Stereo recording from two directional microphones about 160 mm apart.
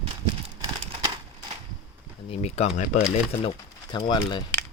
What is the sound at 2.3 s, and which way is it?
Speech, 40° left (ahead or behind).